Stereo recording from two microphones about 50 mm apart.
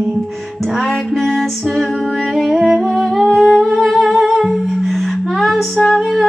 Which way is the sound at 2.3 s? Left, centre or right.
Centre.